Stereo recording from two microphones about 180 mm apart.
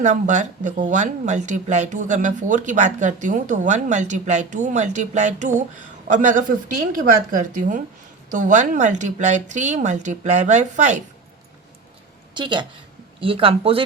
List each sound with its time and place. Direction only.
0.0 s a woman's voice: 45° right (ahead or behind)
12.3 s a woman's voice: 25° right (ahead or behind)